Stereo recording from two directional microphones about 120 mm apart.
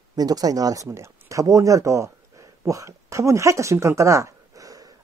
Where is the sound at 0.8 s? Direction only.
25° right (ahead or behind).